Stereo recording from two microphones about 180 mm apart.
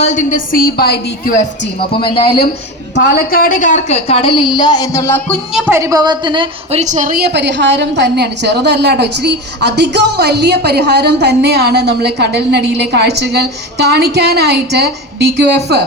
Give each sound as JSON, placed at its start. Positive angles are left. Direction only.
{"t": 0.0, "sound": "a woman's voice", "side_deg": 45}
{"t": 2.0, "sound": "speech", "side_deg": 30}
{"t": 2.9, "sound": "a woman's voice", "side_deg": 60}
{"t": 5.5, "sound": "a woman's voice", "side_deg": -10}